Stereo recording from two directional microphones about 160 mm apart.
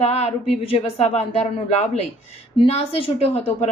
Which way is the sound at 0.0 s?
40° left (ahead or behind).